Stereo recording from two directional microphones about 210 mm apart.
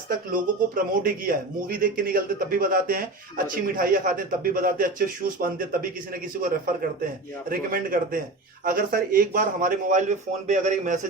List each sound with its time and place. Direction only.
0.1 s speech: 40° right (ahead or behind)
7.5 s speech: 40° right (ahead or behind)